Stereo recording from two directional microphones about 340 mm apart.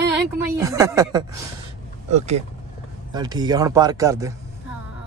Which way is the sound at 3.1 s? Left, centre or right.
Centre.